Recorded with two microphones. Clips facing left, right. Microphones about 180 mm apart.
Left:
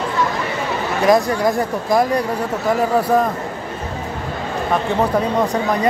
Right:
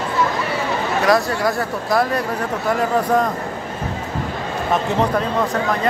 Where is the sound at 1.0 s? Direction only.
15° left (ahead or behind).